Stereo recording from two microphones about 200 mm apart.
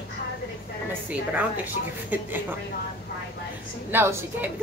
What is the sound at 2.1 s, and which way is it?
Speech, 10° right (ahead or behind).